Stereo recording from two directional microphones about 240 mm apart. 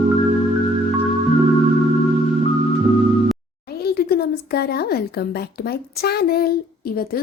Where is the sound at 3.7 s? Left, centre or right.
Left.